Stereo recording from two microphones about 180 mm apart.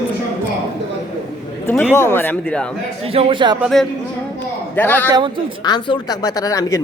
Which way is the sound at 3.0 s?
30° right (ahead or behind).